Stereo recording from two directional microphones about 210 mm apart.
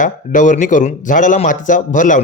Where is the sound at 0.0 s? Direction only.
35° left (ahead or behind).